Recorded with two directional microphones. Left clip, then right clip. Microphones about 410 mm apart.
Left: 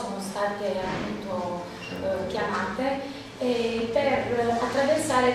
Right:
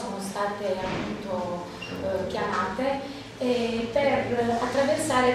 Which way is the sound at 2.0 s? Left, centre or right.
Centre.